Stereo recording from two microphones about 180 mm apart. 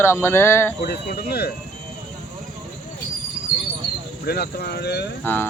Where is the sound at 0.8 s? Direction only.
60° left (ahead or behind).